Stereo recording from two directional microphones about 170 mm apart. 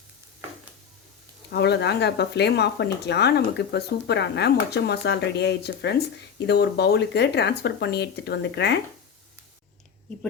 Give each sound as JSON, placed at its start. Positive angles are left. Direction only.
{"t": 1.5, "sound": "speech", "side_deg": 75}